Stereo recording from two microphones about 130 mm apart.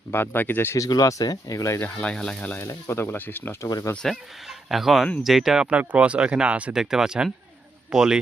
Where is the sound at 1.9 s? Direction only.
10° left (ahead or behind).